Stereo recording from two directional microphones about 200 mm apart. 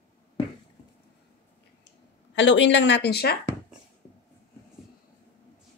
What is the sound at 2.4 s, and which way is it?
Speech, 65° left (ahead or behind).